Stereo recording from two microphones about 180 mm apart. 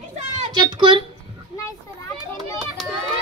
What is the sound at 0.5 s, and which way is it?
Speech, 25° right (ahead or behind).